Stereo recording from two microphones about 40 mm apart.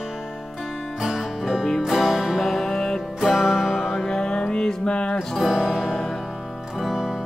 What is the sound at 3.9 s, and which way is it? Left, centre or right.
Music, centre.